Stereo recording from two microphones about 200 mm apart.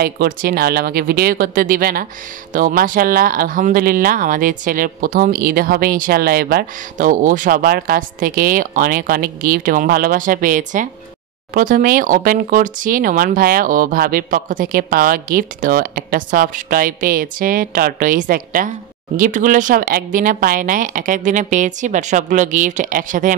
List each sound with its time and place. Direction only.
0.0 s speech: 50° right (ahead or behind)